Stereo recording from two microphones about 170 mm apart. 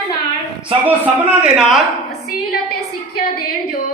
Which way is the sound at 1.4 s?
Centre (ahead or behind).